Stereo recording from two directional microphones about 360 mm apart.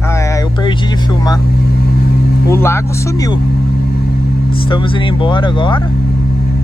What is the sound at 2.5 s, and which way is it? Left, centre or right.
Speech, centre.